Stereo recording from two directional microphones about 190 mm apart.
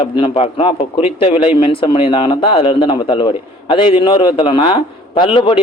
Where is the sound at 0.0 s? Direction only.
30° left (ahead or behind).